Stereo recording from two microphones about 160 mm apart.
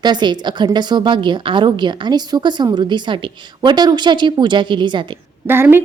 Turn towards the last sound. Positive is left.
turn(degrees=-15)  # may be behind; listen again after turning